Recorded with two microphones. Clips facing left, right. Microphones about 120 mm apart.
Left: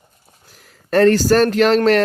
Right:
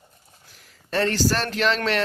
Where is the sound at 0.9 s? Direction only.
50° left (ahead or behind).